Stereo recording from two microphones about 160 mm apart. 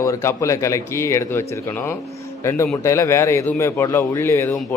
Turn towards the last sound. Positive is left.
turn(degrees=20)  # may be behind; listen again after turning